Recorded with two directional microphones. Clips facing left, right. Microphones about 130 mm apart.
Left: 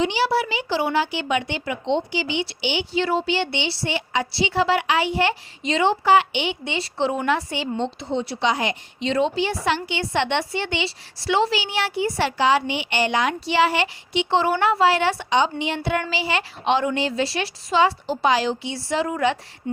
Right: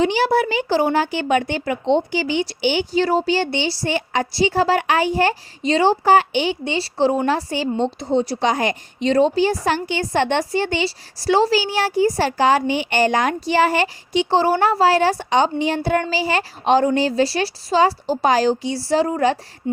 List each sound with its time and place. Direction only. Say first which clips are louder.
0.0 s speech: right 4 dB; 45° right (ahead or behind)
19.6 s speech: right 4 dB; 25° right (ahead or behind)